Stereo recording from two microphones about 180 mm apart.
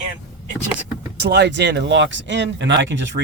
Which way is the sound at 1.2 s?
70° right (ahead or behind).